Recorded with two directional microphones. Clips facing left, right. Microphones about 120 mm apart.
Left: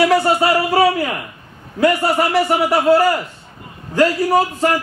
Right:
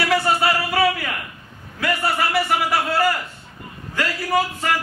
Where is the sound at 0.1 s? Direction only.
35° left (ahead or behind).